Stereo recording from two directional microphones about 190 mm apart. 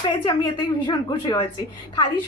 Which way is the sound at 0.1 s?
25° left (ahead or behind).